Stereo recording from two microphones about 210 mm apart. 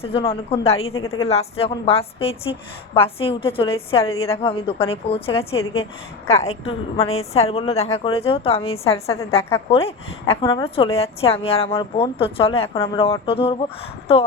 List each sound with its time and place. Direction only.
0.0 s a woman's voice: 25° left (ahead or behind)
0.9 s a woman's voice: 75° left (ahead or behind)
1.3 s a woman's voice: 30° left (ahead or behind)
6.7 s a woman's voice: 30° left (ahead or behind)